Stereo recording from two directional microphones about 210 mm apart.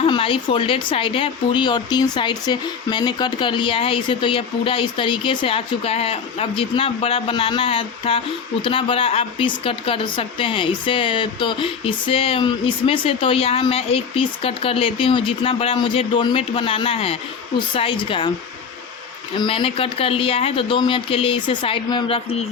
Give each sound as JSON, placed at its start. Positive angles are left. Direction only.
{"t": 0.0, "sound": "speech", "side_deg": 25}
{"t": 19.4, "sound": "speech", "side_deg": 25}